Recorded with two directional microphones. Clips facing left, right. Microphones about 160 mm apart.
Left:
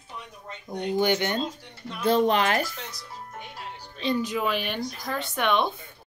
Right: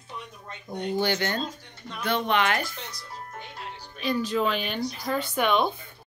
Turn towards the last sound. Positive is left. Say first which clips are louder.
# right 1 dB
turn(degrees=0)  # may be behind; listen again after turning